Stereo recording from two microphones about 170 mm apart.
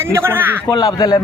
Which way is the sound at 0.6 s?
25° left (ahead or behind).